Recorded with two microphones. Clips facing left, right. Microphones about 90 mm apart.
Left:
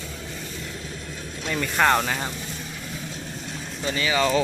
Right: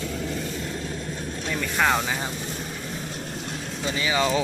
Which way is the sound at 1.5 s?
Centre (ahead or behind).